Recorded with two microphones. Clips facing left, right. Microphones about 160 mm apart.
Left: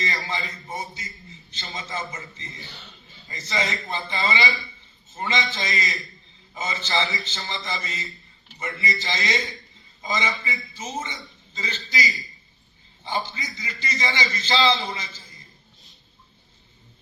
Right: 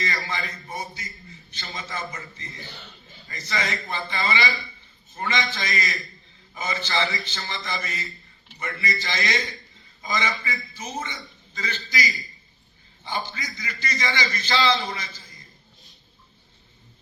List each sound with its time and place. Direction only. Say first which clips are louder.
0.0 s a man's voice: even; 20° left (ahead or behind)